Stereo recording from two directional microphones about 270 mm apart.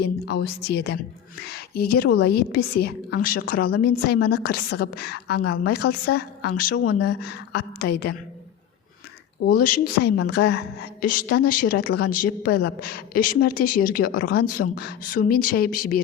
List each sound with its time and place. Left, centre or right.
0.0 s a woman's voice: left
9.4 s a woman's voice: left